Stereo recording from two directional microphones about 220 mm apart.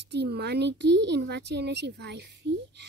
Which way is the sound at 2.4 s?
55° right (ahead or behind).